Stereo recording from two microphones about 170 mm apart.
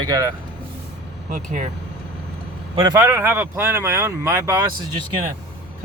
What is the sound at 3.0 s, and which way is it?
Speech, 15° right (ahead or behind).